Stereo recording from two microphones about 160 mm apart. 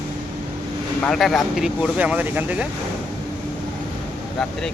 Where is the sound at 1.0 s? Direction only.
Centre (ahead or behind).